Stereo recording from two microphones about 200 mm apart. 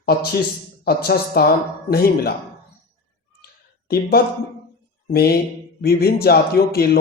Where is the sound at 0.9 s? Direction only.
50° left (ahead or behind).